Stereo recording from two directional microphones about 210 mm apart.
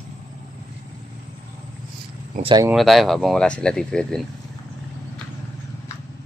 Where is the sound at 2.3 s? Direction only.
25° right (ahead or behind).